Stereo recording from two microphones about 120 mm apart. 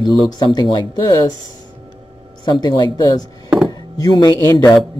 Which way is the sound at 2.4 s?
35° left (ahead or behind).